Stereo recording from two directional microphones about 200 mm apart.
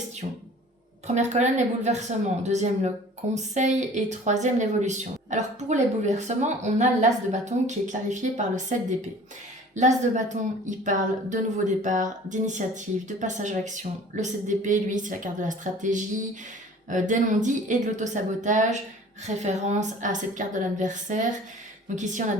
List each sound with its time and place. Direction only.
1.0 s speech: 35° right (ahead or behind)